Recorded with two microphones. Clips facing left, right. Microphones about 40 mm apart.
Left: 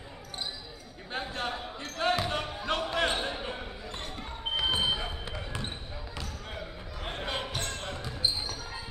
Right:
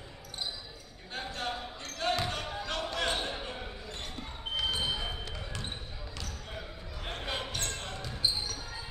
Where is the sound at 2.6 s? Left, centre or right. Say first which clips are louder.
Left 5 dB; left.